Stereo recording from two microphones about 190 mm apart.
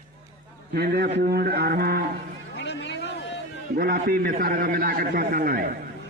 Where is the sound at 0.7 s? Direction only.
55° right (ahead or behind).